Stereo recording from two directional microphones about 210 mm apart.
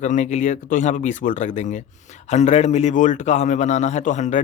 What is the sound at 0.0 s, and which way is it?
Speech, 35° left (ahead or behind).